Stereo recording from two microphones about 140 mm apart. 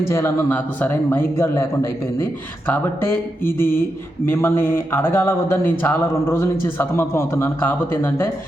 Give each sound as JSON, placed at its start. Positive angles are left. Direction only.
{"t": 0.1, "sound": "a man's voice", "side_deg": 20}